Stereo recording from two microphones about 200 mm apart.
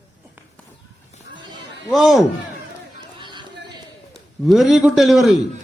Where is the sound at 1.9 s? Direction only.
Centre (ahead or behind).